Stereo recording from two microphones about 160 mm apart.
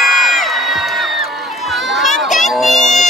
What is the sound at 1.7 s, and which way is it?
Run, centre (ahead or behind).